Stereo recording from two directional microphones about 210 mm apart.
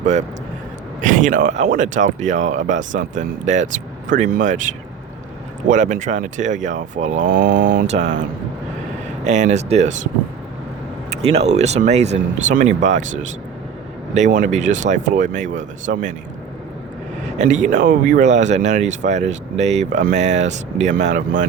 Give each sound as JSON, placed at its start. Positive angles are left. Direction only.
{"t": 0.0, "sound": "speech", "side_deg": -35}
{"t": 5.6, "sound": "speech", "side_deg": -35}
{"t": 9.2, "sound": "speech", "side_deg": -35}
{"t": 11.1, "sound": "speech", "side_deg": -30}
{"t": 17.3, "sound": "speech", "side_deg": -35}